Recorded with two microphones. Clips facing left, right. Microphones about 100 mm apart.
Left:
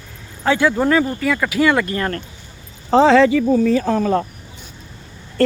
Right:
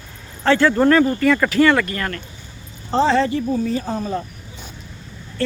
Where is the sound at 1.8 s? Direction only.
25° left (ahead or behind).